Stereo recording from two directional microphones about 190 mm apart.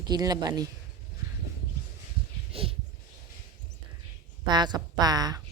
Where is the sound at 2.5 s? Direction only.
30° right (ahead or behind).